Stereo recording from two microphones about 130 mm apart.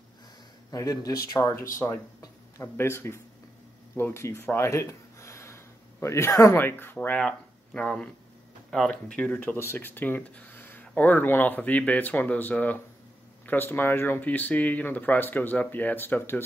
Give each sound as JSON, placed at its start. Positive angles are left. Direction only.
{"t": 0.7, "sound": "speech", "side_deg": 30}